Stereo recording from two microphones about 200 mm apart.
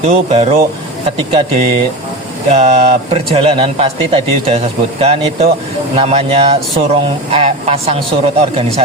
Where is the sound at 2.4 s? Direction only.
30° right (ahead or behind).